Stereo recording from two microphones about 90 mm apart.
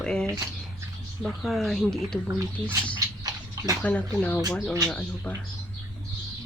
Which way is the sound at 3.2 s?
40° right (ahead or behind).